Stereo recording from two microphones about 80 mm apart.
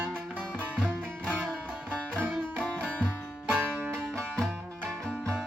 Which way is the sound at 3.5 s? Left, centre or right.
Right.